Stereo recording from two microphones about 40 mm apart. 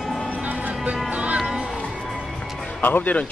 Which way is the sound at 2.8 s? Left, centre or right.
Left.